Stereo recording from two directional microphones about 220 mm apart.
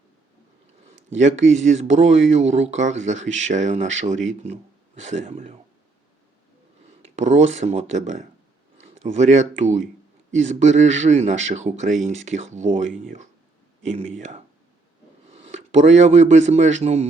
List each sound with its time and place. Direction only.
0.9 s speech: 35° right (ahead or behind)
7.0 s speech: 30° right (ahead or behind)